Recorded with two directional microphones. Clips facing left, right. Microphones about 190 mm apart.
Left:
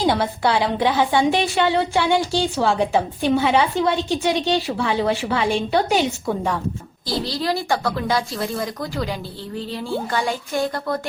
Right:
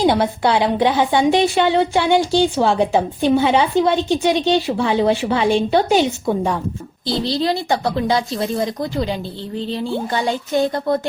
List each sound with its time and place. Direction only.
0.0 s a woman's voice: 20° right (ahead or behind)